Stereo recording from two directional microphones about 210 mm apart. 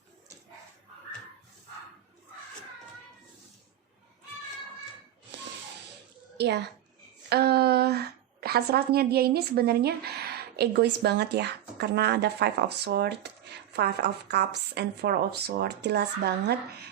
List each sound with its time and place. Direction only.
6.3 s a woman's voice: 50° right (ahead or behind)